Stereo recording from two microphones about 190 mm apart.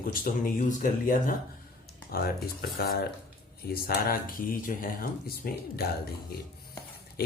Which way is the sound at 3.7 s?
50° left (ahead or behind).